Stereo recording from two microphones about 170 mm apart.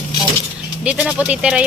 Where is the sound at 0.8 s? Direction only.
5° right (ahead or behind).